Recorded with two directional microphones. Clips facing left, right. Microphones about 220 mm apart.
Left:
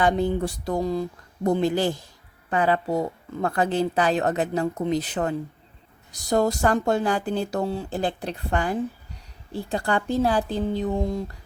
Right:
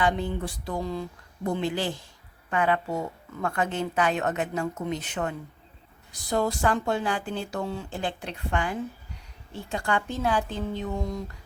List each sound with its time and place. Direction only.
0.0 s speech: 40° left (ahead or behind)